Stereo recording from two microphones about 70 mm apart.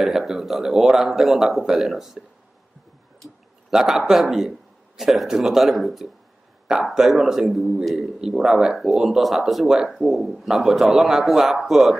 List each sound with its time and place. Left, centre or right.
0.0 s a man's voice: centre
3.7 s a man's voice: centre